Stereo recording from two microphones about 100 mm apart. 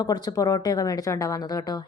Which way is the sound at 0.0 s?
40° left (ahead or behind).